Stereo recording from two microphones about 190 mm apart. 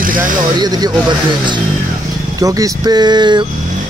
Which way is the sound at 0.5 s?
20° right (ahead or behind).